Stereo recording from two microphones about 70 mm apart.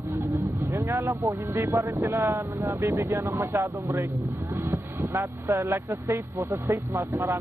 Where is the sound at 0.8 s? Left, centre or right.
Right.